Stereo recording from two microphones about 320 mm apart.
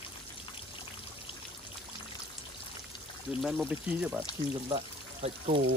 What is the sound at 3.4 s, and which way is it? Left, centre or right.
Speech, centre.